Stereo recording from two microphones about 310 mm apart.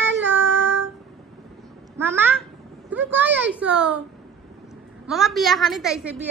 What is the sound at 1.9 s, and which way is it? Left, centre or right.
Speech, centre.